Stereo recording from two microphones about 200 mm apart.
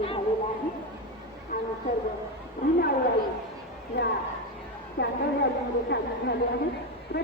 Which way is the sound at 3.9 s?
55° left (ahead or behind).